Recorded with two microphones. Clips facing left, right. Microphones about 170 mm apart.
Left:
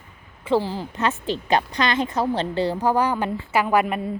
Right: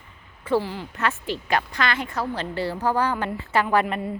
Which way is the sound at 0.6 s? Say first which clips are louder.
Left 2 dB; 30° left (ahead or behind).